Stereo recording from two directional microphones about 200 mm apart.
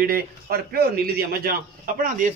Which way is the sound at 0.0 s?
50° right (ahead or behind).